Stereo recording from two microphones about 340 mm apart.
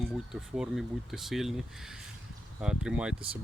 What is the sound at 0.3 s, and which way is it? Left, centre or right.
Speech, centre.